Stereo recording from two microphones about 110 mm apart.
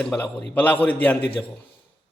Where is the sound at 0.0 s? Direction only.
10° left (ahead or behind).